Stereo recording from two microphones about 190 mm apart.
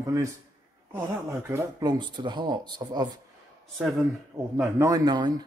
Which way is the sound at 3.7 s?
Centre (ahead or behind).